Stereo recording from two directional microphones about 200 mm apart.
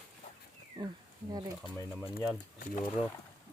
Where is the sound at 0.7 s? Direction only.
20° right (ahead or behind).